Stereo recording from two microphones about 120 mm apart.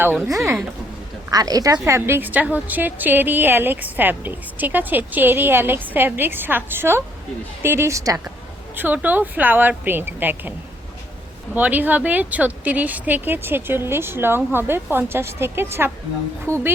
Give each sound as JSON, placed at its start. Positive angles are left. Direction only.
{"t": 1.3, "sound": "a woman's voice", "side_deg": -30}
{"t": 8.7, "sound": "a woman's voice", "side_deg": -15}
{"t": 11.5, "sound": "a woman's voice", "side_deg": -15}